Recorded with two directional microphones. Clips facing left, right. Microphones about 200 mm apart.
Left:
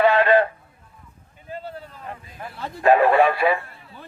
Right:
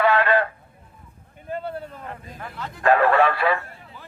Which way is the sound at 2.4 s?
15° left (ahead or behind).